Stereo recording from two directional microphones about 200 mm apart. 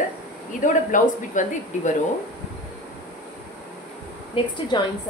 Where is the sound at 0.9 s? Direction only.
40° left (ahead or behind).